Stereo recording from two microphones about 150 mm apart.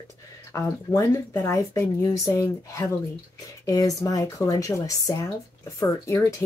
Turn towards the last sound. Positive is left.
turn(degrees=15)  # may be behind; listen again after turning